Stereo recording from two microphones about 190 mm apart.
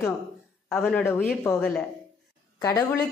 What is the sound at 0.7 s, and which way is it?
A man's voice, 5° left (ahead or behind).